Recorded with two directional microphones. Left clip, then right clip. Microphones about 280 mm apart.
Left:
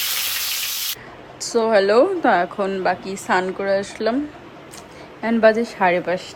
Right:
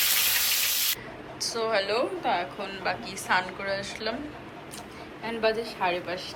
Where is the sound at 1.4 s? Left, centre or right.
Left.